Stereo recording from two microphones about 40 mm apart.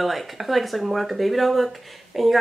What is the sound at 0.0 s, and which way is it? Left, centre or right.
Speech, centre.